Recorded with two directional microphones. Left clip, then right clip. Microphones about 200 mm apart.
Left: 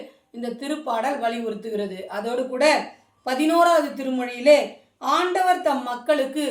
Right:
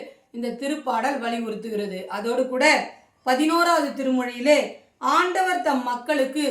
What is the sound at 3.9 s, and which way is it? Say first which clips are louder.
A woman's voice: right 2 dB; 15° right (ahead or behind).